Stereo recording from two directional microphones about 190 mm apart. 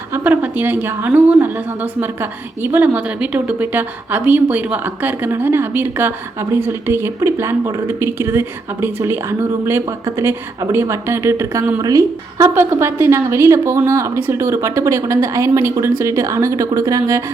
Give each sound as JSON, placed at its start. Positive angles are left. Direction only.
{"t": 0.1, "sound": "a woman's voice", "side_deg": -10}